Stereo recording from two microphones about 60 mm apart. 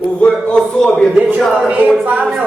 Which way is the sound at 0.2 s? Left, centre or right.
Centre.